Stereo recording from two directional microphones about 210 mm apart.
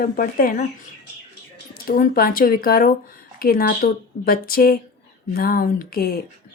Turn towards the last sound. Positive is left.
turn(degrees=45)  # may be behind; listen again after turning